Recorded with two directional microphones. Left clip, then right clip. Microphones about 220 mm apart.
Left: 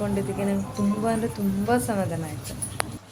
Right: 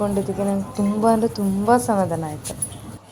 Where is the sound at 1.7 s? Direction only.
20° right (ahead or behind).